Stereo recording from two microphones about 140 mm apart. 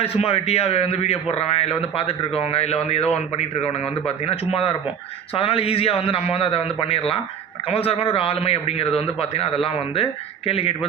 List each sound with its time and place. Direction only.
0.0 s a man's voice: 45° left (ahead or behind)